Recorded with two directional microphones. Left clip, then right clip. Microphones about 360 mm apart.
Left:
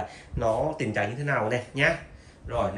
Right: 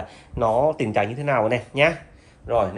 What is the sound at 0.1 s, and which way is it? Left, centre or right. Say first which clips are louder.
Speech: right 7 dB; centre.